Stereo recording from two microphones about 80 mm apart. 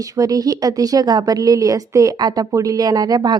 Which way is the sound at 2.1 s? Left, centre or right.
Right.